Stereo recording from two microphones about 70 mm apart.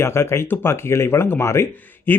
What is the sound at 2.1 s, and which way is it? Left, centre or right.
Speech, left.